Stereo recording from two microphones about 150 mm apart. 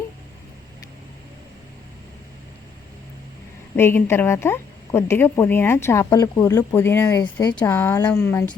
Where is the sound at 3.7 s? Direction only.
15° left (ahead or behind).